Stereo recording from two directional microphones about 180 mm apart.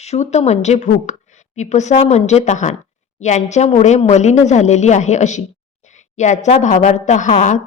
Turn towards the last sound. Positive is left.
turn(degrees=40)  # may be behind; listen again after turning